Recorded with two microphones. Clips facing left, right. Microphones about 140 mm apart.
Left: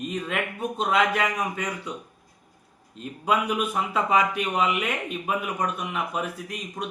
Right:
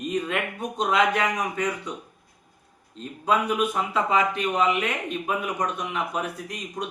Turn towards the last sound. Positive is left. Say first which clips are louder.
# right 1 dB
turn(degrees=5)  # may be behind; listen again after turning